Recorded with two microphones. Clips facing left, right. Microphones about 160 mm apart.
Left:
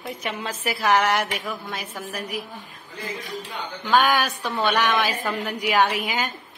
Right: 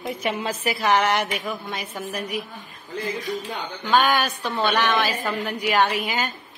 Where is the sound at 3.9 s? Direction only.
Centre (ahead or behind).